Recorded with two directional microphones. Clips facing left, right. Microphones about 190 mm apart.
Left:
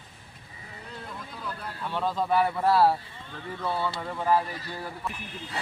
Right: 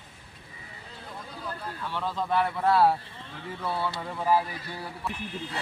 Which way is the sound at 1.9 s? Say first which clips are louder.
Left 3 dB; 15° left (ahead or behind).